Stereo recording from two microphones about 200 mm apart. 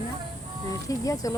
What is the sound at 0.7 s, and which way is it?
Speech, 15° left (ahead or behind).